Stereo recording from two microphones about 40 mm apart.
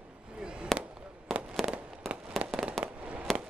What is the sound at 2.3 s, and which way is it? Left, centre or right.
Fireworks, centre.